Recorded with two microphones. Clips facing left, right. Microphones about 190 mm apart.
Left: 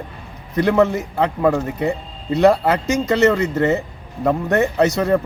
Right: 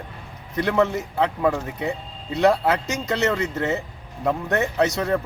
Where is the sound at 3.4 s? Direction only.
70° left (ahead or behind).